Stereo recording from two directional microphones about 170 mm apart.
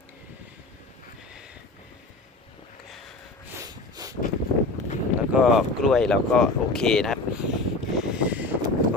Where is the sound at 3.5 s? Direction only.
20° right (ahead or behind).